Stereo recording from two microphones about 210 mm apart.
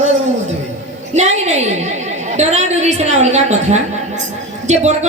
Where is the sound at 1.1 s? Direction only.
35° right (ahead or behind).